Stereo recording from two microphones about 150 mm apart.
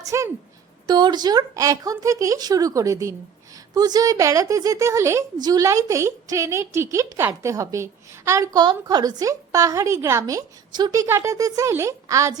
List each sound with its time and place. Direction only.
0.0 s music: 20° right (ahead or behind)
0.9 s a woman's voice: 30° right (ahead or behind)